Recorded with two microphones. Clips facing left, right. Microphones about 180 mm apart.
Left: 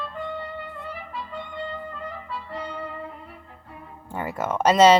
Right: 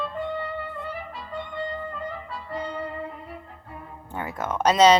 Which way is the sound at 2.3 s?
45° right (ahead or behind).